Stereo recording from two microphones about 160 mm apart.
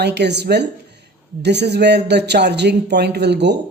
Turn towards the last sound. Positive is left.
turn(degrees=-90)